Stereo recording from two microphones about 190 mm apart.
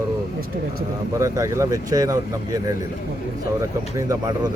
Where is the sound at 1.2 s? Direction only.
15° right (ahead or behind).